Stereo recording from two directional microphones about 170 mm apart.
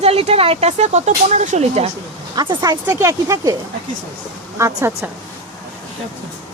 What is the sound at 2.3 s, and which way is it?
Speech, 25° right (ahead or behind).